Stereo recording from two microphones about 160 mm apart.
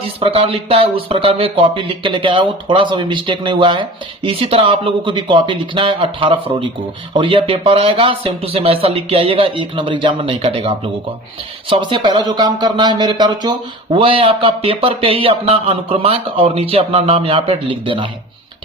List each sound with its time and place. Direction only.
0.0 s speech: 35° right (ahead or behind)